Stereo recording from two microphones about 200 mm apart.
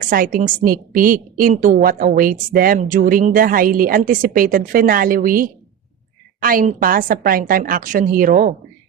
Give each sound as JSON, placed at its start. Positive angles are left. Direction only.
{"t": 0.0, "sound": "a woman's voice", "side_deg": -45}